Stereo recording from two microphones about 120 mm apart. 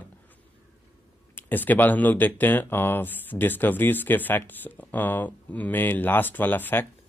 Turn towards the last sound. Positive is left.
turn(degrees=15)  # may be behind; listen again after turning